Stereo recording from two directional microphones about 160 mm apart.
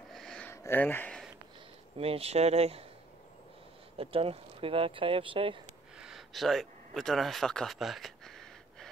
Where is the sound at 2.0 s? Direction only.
40° right (ahead or behind).